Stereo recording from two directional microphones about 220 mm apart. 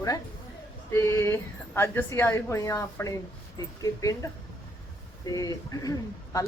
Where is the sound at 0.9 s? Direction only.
15° left (ahead or behind).